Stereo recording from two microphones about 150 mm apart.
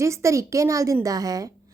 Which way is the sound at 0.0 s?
20° right (ahead or behind).